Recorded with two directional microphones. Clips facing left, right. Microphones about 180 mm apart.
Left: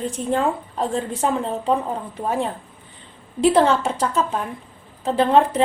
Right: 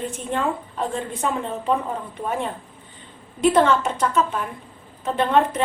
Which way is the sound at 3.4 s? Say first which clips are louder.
Left 1 dB; 30° left (ahead or behind).